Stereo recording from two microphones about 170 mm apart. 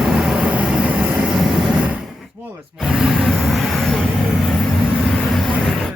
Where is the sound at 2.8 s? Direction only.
Centre (ahead or behind).